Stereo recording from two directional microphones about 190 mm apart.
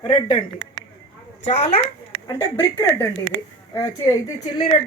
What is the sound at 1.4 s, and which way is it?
Speech, 35° left (ahead or behind).